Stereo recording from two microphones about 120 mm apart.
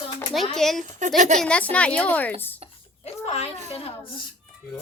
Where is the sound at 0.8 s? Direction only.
90° right.